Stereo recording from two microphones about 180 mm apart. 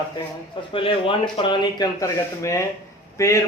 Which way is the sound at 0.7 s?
30° left (ahead or behind).